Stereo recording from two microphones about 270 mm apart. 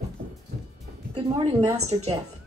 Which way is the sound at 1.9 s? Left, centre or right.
Centre.